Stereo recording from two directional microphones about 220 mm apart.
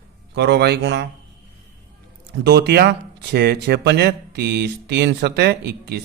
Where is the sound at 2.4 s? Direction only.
50° right (ahead or behind).